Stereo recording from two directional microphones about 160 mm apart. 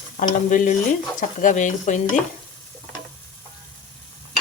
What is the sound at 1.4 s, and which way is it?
Speech, 50° left (ahead or behind).